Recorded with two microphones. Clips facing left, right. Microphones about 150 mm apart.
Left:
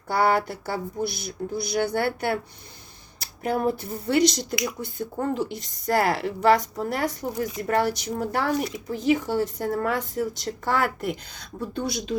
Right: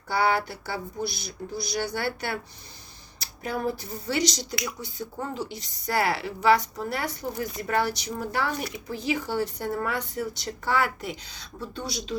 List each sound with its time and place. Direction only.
0.1 s a woman's voice: 50° left (ahead or behind)